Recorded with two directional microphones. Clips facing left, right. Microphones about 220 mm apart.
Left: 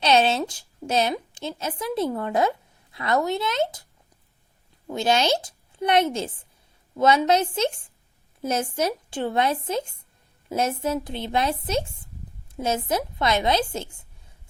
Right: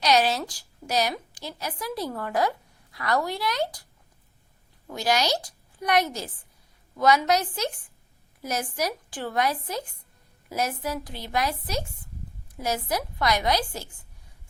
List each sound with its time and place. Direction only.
0.0 s a woman's voice: 25° left (ahead or behind)
4.9 s a woman's voice: 25° left (ahead or behind)